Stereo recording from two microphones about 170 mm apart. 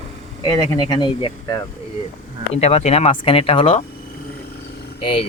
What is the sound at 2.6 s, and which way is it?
Speech, 40° left (ahead or behind).